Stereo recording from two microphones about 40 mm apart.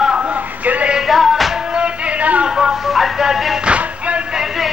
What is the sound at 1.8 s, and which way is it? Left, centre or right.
Music, right.